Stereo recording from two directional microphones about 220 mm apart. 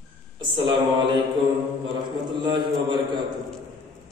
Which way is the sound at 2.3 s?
20° right (ahead or behind).